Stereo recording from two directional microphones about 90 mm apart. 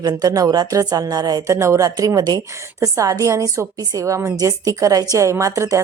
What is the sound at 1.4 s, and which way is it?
A woman's voice, 35° right (ahead or behind).